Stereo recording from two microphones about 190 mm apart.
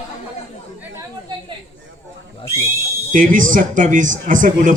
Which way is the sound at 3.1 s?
45° right (ahead or behind).